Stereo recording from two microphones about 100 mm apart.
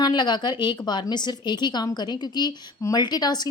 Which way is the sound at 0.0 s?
45° left (ahead or behind).